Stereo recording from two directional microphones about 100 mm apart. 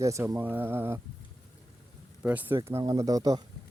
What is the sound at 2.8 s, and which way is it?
Speech, 40° right (ahead or behind).